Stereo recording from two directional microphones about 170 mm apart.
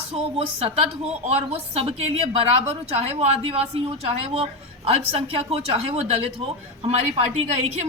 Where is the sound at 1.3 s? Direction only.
40° right (ahead or behind).